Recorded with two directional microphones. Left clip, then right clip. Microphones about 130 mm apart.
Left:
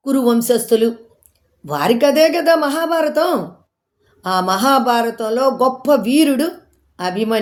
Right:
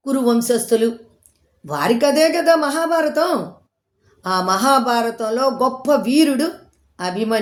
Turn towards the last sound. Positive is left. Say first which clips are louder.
# left 2 dB
turn(degrees=20)  # may be behind; listen again after turning